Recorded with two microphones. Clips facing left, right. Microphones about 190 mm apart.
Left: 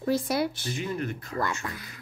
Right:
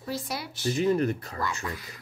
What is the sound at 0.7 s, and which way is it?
Speech, 40° right (ahead or behind).